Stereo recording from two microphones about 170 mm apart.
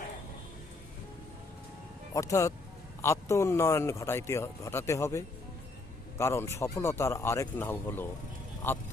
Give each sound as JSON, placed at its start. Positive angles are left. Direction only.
{"t": 2.1, "sound": "speech", "side_deg": 20}